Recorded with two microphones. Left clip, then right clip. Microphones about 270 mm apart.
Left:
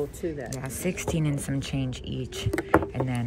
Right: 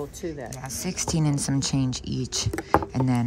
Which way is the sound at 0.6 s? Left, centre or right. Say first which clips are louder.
Even; centre.